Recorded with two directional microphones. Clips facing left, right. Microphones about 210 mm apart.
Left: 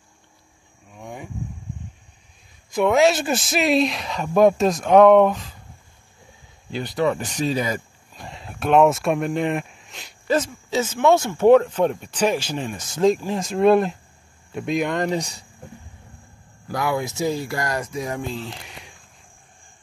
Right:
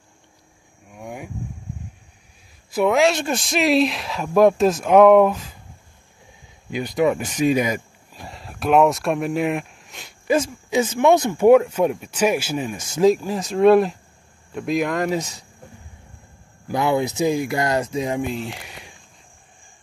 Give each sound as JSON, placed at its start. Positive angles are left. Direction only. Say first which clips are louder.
{"t": 0.9, "sound": "a sound", "louder": "right 2 dB", "side_deg": -10}
{"t": 2.7, "sound": "speech", "louder": "even", "side_deg": 0}
{"t": 7.0, "sound": "speech", "louder": "right 3 dB", "side_deg": -10}
{"t": 10.2, "sound": "speech", "louder": "right 2 dB", "side_deg": -10}
{"t": 16.6, "sound": "speech", "louder": "right 4 dB", "side_deg": -20}